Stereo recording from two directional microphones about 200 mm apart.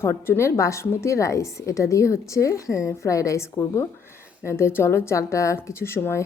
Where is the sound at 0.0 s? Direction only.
15° left (ahead or behind).